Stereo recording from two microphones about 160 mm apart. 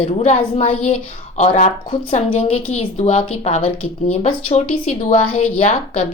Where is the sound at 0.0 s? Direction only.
40° left (ahead or behind).